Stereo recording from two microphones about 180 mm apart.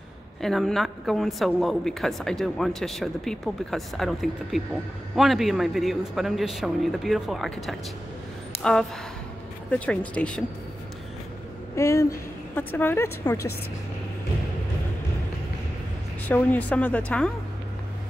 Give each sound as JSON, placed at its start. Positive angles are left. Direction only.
{"t": 0.4, "sound": "a woman's voice", "side_deg": 0}
{"t": 11.7, "sound": "a woman's voice", "side_deg": 15}
{"t": 16.3, "sound": "a woman's voice", "side_deg": 10}